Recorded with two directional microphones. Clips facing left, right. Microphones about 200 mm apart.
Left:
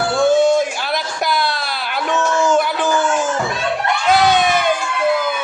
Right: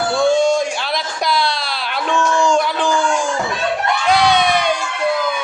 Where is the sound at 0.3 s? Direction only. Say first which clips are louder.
Left 2 dB; 5° left (ahead or behind).